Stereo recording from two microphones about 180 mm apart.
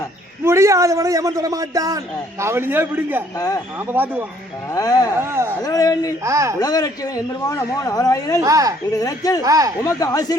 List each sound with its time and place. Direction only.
0.4 s a man's voice: 15° right (ahead or behind)
3.3 s a man's voice: 20° left (ahead or behind)
3.8 s a man's voice: 10° right (ahead or behind)
4.7 s a man's voice: 20° left (ahead or behind)
5.1 s a man's voice: 15° right (ahead or behind)
5.6 s a man's voice: 20° left (ahead or behind)
6.2 s a man's voice: 15° right (ahead or behind)
6.6 s a man's voice: 20° left (ahead or behind)
8.4 s a man's voice: 20° right (ahead or behind)
8.9 s a man's voice: 20° left (ahead or behind)
9.4 s a man's voice: 20° right (ahead or behind)
9.8 s a man's voice: 20° left (ahead or behind)